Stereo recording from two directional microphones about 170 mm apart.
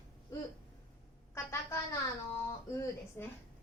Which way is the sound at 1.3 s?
15° left (ahead or behind).